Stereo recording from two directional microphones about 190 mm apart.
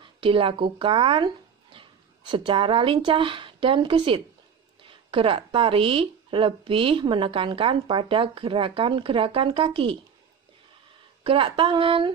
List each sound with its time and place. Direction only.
0.0 s speech: 25° right (ahead or behind)
11.2 s speech: 25° right (ahead or behind)